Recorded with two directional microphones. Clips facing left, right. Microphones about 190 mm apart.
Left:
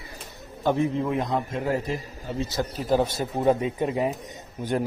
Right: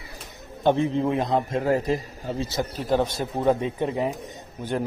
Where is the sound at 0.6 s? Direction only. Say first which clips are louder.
Right 2 dB; 25° right (ahead or behind).